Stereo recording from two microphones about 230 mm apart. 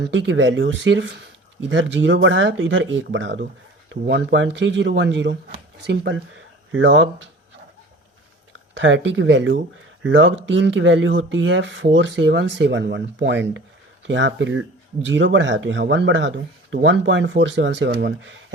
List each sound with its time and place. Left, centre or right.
0.1 s speech: right
8.7 s speech: right